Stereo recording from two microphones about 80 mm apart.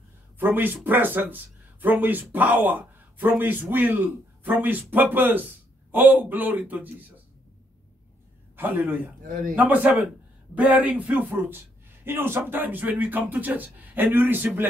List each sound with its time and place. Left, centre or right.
0.4 s speech: right
8.5 s speech: right